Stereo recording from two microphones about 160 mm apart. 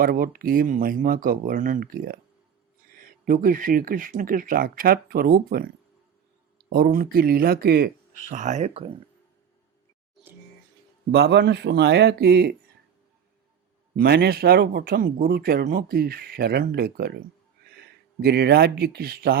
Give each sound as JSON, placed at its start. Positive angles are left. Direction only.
{"t": 0.0, "sound": "speech", "side_deg": -65}
{"t": 8.3, "sound": "speech", "side_deg": -50}
{"t": 11.1, "sound": "speech", "side_deg": -90}
{"t": 13.9, "sound": "speech", "side_deg": -75}